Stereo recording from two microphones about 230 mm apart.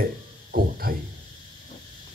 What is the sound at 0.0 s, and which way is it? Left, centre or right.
Music, right.